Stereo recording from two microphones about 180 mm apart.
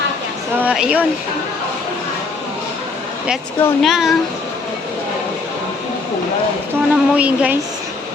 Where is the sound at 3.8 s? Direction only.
Centre (ahead or behind).